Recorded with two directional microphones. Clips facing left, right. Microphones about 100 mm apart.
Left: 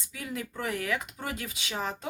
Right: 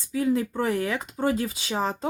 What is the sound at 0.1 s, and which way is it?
Speech, 30° right (ahead or behind).